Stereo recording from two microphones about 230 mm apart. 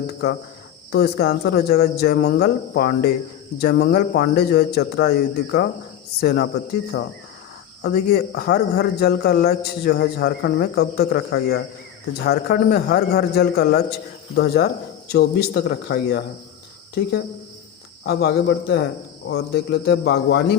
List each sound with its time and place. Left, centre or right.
0.9 s a man's voice: left
6.9 s speech: left
7.9 s a man's voice: left